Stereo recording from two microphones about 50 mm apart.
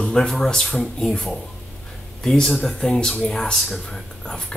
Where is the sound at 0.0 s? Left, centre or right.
Centre.